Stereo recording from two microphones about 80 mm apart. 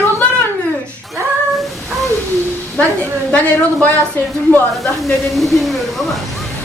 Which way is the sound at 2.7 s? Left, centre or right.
Centre.